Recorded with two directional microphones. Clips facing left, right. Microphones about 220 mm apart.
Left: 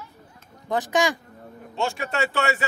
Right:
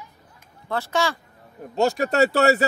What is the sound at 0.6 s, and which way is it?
Speech, 15° left (ahead or behind).